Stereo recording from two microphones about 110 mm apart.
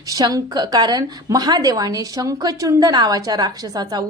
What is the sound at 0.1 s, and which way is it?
A woman's voice, 35° right (ahead or behind).